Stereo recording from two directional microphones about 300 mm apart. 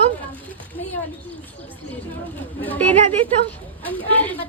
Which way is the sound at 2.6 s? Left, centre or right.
Centre.